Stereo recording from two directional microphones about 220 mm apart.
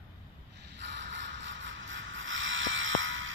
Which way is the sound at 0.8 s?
50° right (ahead or behind).